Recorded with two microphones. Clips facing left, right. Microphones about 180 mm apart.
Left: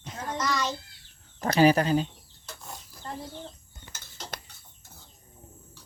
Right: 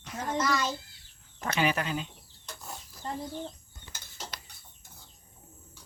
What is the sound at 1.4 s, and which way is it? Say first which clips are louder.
Speech: left 8 dB; 35° left (ahead or behind).